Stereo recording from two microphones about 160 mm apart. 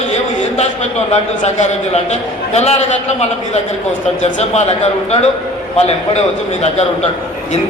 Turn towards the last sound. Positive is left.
turn(degrees=40)  # may be behind; listen again after turning